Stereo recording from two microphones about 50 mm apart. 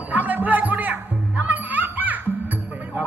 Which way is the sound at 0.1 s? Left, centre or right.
Right.